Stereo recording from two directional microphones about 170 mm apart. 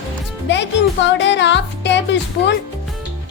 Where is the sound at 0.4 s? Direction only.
90° left.